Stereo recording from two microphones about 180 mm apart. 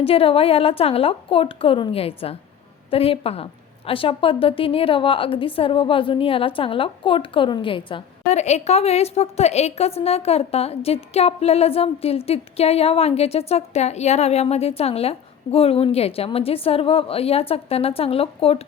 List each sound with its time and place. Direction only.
0.0 s a woman's voice: 30° left (ahead or behind)